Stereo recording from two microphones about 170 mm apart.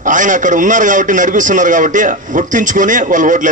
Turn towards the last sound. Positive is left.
turn(degrees=-50)  # may be behind; listen again after turning